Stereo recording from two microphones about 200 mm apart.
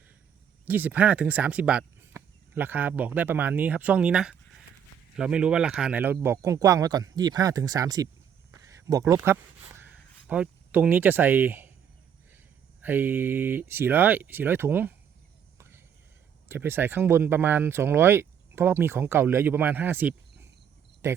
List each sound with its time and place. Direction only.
0.6 s speech: 10° right (ahead or behind)
8.5 s a sound: 15° right (ahead or behind)
12.8 s speech: 10° right (ahead or behind)
16.5 s speech: 10° right (ahead or behind)
21.0 s cricket: 15° right (ahead or behind)